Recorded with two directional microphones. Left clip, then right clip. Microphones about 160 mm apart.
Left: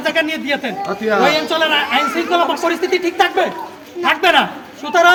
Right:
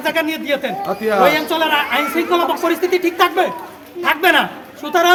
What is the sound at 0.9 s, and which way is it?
Speech, centre (ahead or behind).